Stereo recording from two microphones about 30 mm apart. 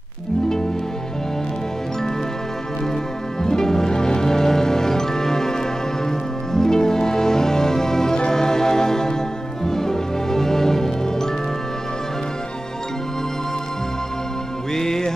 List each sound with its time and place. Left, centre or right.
3.4 s music: centre
14.7 s music: centre